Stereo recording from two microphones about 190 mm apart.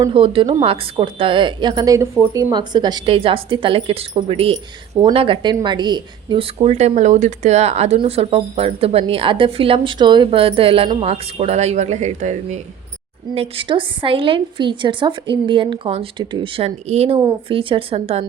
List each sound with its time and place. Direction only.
0.0 s a woman's voice: 30° right (ahead or behind)